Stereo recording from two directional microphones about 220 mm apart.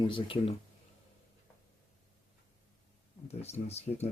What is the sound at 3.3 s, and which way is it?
Speech, 30° left (ahead or behind).